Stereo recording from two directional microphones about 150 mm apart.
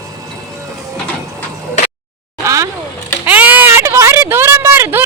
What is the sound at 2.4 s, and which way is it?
Vehicle, 20° right (ahead or behind).